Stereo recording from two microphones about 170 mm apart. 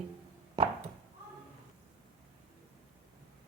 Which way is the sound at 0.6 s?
25° right (ahead or behind).